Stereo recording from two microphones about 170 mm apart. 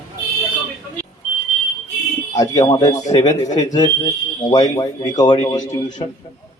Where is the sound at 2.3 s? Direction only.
20° left (ahead or behind).